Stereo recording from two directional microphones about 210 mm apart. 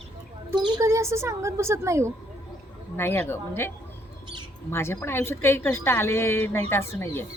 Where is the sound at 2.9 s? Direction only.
10° left (ahead or behind).